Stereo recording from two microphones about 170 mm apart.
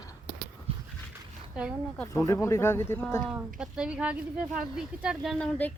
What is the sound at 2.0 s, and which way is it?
Speech, 15° left (ahead or behind).